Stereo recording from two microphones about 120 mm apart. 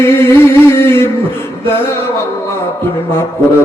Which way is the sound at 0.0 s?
20° left (ahead or behind).